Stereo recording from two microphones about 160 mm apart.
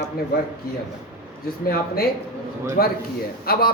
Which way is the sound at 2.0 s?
70° left (ahead or behind).